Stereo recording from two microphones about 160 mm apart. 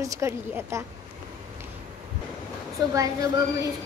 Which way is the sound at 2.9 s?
20° right (ahead or behind).